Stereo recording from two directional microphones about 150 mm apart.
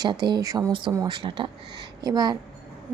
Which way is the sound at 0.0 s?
30° right (ahead or behind).